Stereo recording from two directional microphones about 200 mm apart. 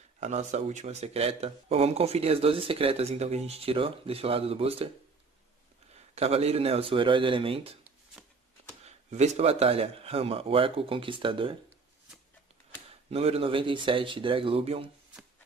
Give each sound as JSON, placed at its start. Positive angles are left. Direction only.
{"t": 0.2, "sound": "speech", "side_deg": -35}
{"t": 5.9, "sound": "speech", "side_deg": -30}
{"t": 8.8, "sound": "speech", "side_deg": -35}
{"t": 13.1, "sound": "speech", "side_deg": -30}